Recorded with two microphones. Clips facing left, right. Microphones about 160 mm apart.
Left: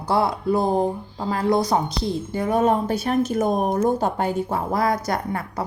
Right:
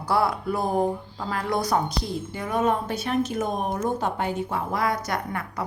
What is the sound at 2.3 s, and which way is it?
A woman's voice, 35° left (ahead or behind).